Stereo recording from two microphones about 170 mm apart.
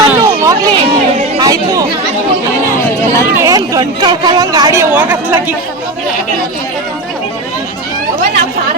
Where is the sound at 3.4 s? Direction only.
20° right (ahead or behind).